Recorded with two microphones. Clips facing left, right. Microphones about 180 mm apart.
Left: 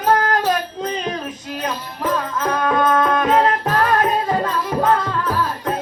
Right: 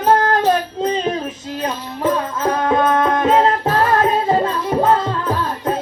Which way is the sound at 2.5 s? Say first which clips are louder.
Right 1 dB; 25° right (ahead or behind).